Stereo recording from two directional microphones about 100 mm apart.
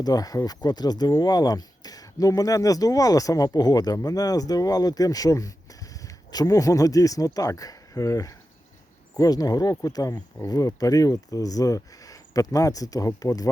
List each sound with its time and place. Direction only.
0.0 s speech: 40° left (ahead or behind)